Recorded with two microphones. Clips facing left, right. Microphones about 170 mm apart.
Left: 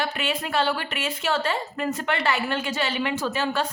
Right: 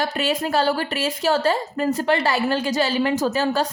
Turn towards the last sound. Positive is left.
turn(degrees=-40)  # may be behind; listen again after turning